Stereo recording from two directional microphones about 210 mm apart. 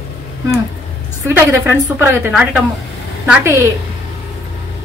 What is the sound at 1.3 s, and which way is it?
A woman's voice, 10° right (ahead or behind).